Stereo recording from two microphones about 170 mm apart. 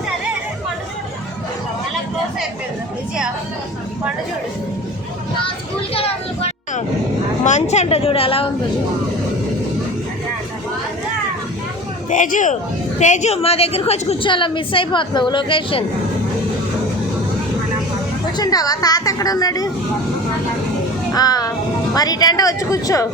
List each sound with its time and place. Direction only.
5.9 s children playing: 35° left (ahead or behind)
7.4 s a woman's voice: 45° left (ahead or behind)
12.1 s a man's voice: 50° left (ahead or behind); by 15.8 s 30° left (ahead or behind)
18.3 s a woman's voice: 20° left (ahead or behind)
21.1 s a child's voice: 20° left (ahead or behind)